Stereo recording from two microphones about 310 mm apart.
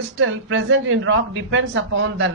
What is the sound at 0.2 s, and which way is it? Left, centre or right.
Speech, right.